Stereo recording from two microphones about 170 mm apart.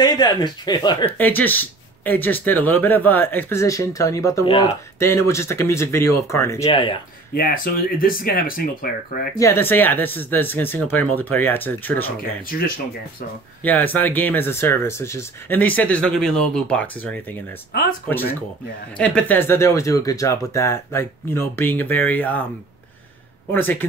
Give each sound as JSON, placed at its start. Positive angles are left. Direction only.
{"t": 0.0, "sound": "speech", "side_deg": 25}
{"t": 1.1, "sound": "speech", "side_deg": 10}
{"t": 4.5, "sound": "speech", "side_deg": 35}
{"t": 4.9, "sound": "speech", "side_deg": 15}
{"t": 6.6, "sound": "speech", "side_deg": 30}
{"t": 7.3, "sound": "speech", "side_deg": 55}
{"t": 9.4, "sound": "speech", "side_deg": 15}
{"t": 12.2, "sound": "speech", "side_deg": 60}
{"t": 13.6, "sound": "speech", "side_deg": 10}
{"t": 23.5, "sound": "speech", "side_deg": 10}